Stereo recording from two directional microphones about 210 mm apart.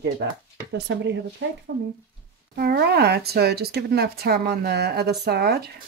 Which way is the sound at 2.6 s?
50° right (ahead or behind).